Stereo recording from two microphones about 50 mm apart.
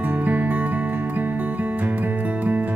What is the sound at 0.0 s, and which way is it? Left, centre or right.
Music, right.